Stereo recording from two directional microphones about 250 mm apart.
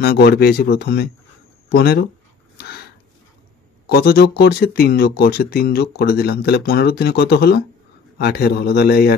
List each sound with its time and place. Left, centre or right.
0.0 s speech: left
3.9 s speech: left